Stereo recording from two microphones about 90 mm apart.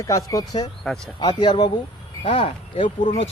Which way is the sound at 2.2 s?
85° left.